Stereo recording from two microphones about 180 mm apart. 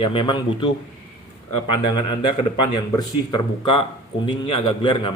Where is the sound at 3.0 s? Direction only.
25° left (ahead or behind).